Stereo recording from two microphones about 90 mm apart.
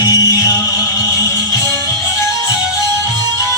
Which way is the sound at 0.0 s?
40° left (ahead or behind).